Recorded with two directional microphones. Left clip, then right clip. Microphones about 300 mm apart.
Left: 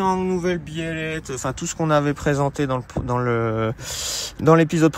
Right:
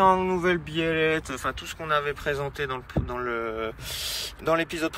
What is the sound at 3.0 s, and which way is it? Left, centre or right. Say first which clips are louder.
Speech: left 3 dB; right.